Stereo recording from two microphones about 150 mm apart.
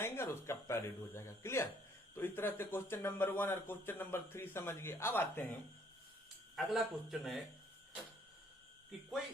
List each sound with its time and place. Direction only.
0.0 s a man's voice: 15° left (ahead or behind)
6.6 s speech: centre (ahead or behind)